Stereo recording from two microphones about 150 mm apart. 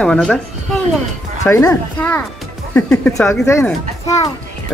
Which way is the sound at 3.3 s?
15° left (ahead or behind).